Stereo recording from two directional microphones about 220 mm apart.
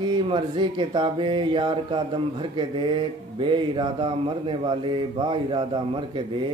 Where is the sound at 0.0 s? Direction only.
20° right (ahead or behind).